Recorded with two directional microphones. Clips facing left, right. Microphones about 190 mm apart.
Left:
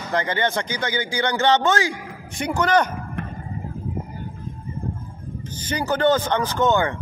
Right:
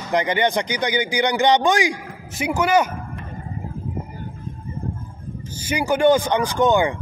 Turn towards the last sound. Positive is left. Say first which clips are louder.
# right 2 dB
turn(degrees=-15)  # may be behind; listen again after turning